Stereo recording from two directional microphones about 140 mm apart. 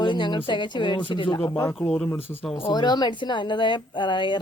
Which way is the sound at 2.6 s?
30° left (ahead or behind).